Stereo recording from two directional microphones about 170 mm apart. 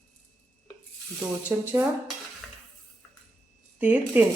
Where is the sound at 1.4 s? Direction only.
10° right (ahead or behind).